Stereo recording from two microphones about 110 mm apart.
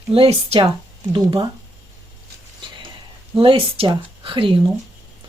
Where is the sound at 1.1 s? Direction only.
40° right (ahead or behind).